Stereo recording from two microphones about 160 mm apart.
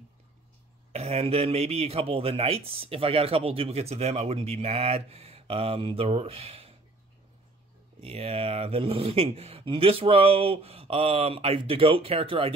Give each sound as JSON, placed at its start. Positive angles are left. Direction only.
{"t": 0.9, "sound": "a man's voice", "side_deg": -40}
{"t": 8.0, "sound": "a man's voice", "side_deg": -40}